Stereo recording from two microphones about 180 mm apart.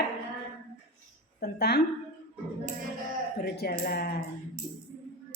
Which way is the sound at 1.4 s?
60° left (ahead or behind).